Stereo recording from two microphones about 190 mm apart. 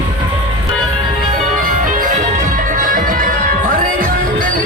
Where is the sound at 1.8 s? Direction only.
45° right (ahead or behind).